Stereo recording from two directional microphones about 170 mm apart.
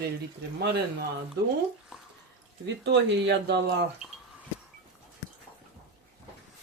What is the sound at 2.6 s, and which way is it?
Speech, 90° right.